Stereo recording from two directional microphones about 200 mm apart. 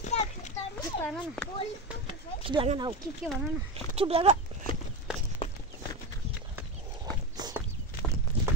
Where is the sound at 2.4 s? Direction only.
25° right (ahead or behind).